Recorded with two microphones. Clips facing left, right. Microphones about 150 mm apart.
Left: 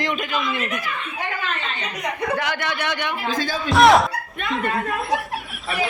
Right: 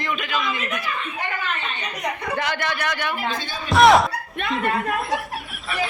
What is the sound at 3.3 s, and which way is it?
Speech, 90° left.